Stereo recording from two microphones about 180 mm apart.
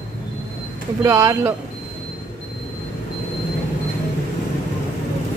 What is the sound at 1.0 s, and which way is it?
Speech, 15° right (ahead or behind).